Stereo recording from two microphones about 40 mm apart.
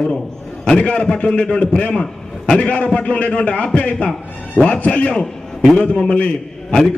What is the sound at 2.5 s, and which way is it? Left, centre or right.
A man's voice, left.